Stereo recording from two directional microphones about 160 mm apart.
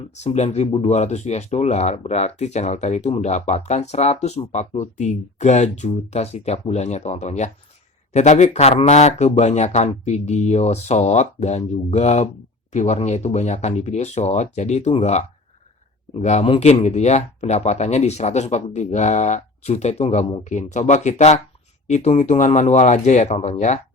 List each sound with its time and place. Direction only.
0.2 s speech: 45° left (ahead or behind)